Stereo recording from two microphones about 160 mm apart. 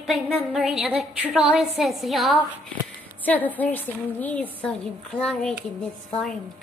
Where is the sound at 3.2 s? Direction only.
10° left (ahead or behind).